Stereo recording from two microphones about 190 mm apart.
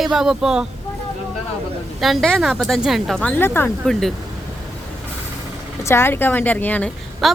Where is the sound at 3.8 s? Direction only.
Centre (ahead or behind).